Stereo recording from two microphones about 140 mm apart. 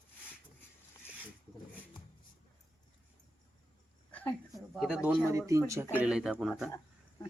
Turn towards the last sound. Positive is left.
turn(degrees=0)  # may be behind; listen again after turning